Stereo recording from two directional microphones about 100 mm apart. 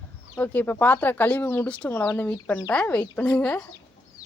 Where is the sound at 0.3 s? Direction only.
20° left (ahead or behind).